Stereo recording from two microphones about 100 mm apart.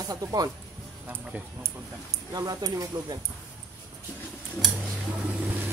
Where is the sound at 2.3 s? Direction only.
40° right (ahead or behind).